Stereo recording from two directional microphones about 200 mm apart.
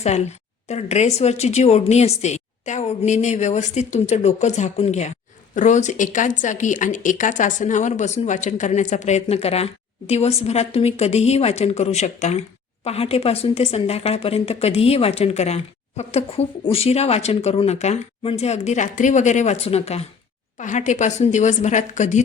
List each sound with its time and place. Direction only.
0.7 s speech: 35° left (ahead or behind)